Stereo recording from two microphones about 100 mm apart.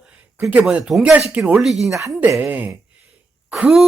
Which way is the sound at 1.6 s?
Centre (ahead or behind).